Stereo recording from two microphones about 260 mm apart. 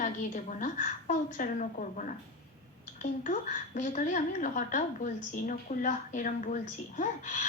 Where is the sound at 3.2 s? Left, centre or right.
Left.